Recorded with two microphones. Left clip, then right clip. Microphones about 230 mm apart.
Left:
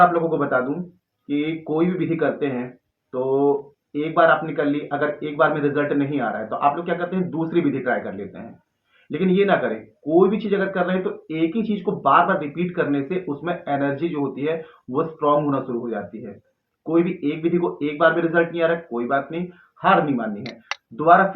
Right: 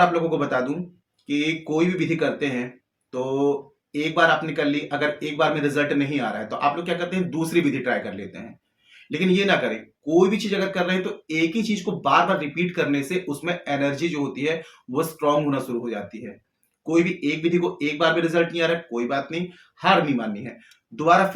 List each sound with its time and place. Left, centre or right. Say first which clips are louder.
0.0 s speech: left 3 dB; right